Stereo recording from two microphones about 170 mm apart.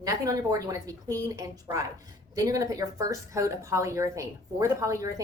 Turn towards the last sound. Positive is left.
turn(degrees=-20)  # may be behind; listen again after turning